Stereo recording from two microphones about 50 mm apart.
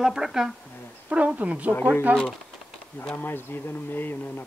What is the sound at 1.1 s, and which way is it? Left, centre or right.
A woman's voice, right.